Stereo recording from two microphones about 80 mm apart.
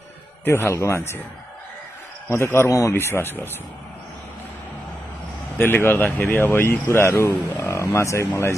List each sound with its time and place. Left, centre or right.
0.5 s speech: left
2.2 s speech: left
5.5 s speech: left
7.6 s speech: left